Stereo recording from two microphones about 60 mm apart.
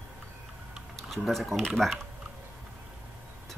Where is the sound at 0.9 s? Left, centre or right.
Centre.